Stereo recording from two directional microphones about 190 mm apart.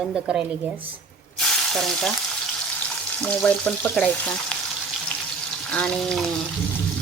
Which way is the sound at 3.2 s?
5° left (ahead or behind).